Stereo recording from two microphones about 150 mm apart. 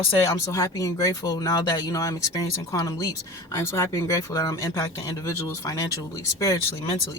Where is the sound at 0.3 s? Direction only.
20° left (ahead or behind).